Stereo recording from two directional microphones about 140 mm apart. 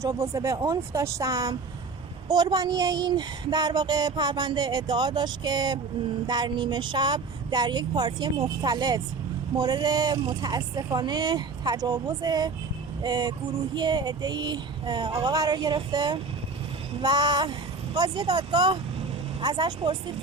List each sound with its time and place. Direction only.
0.0 s speech: 25° right (ahead or behind)